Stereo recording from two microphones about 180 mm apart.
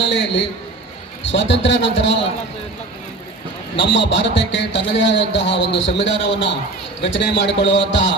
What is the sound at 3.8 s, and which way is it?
A man's voice, 80° left.